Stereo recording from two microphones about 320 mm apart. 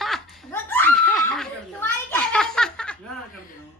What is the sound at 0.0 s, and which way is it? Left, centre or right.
Snicker, centre.